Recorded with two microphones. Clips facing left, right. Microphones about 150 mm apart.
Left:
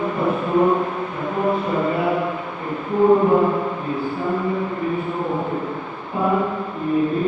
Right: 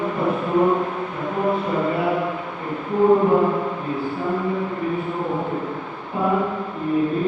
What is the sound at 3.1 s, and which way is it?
Mantra, 35° left (ahead or behind).